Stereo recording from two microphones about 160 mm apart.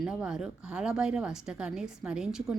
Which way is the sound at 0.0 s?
5° right (ahead or behind).